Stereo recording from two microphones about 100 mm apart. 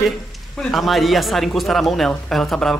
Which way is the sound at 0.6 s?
5° left (ahead or behind).